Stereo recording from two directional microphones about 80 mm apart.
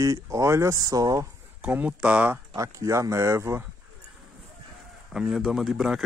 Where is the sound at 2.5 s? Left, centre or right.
Right.